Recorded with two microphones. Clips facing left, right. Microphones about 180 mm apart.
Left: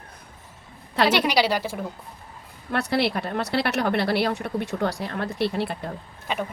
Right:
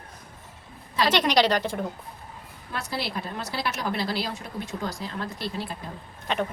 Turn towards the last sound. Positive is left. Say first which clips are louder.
# right 1 dB
turn(degrees=10)  # may be behind; listen again after turning